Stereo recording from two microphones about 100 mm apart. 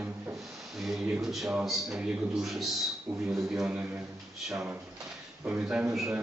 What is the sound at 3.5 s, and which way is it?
Speech, 10° right (ahead or behind).